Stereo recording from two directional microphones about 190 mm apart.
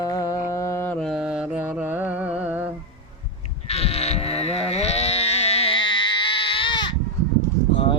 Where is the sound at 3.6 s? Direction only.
35° left (ahead or behind).